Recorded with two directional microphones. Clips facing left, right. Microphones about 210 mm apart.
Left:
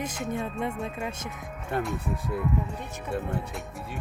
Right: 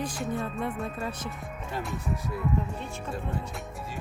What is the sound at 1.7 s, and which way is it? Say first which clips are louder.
Speech: left 6 dB; 55° left (ahead or behind).